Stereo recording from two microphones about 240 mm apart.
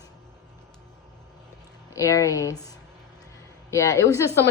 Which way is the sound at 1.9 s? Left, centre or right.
Centre.